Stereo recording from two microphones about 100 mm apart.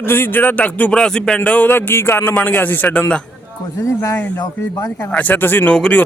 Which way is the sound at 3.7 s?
30° left (ahead or behind).